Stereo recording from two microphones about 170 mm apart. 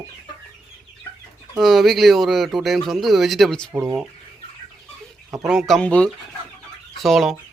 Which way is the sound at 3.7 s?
15° right (ahead or behind).